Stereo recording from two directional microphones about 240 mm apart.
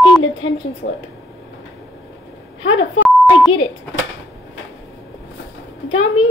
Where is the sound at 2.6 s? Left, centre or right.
Left.